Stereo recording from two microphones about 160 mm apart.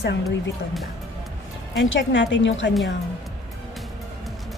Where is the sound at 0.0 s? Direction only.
90° left.